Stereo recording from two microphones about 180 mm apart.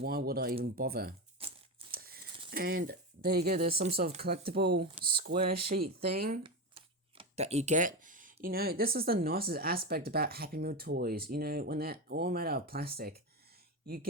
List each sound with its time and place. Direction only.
0.0 s speech: 55° right (ahead or behind)
1.4 s a sound: 30° right (ahead or behind)
1.9 s a sound: 55° right (ahead or behind)
2.5 s speech: 55° right (ahead or behind)
3.7 s speech: 35° right (ahead or behind)
4.5 s speech: 60° right (ahead or behind)
6.4 s speech: 30° right (ahead or behind); by 14.1 s 60° right (ahead or behind)